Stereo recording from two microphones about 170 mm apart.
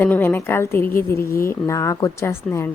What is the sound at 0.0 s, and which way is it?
Speech, 10° left (ahead or behind).